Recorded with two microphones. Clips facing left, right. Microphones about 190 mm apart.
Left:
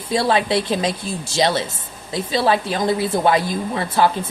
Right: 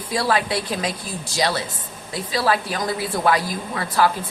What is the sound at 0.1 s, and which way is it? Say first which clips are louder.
A woman's voice: left 4 dB; 25° left (ahead or behind).